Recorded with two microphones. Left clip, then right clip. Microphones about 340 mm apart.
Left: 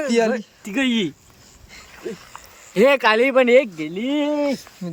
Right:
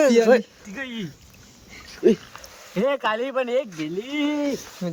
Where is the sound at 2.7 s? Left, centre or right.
Left.